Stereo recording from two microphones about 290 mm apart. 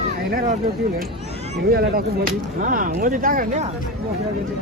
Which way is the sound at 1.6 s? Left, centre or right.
Right.